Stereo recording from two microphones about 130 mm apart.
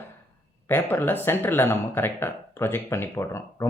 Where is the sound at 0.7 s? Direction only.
15° left (ahead or behind).